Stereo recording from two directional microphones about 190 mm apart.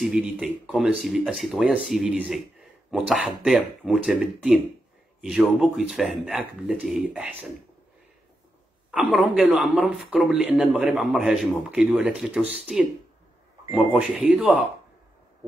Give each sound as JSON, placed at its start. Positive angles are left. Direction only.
{"t": 0.0, "sound": "a man's voice", "side_deg": -5}
{"t": 8.9, "sound": "a man's voice", "side_deg": -5}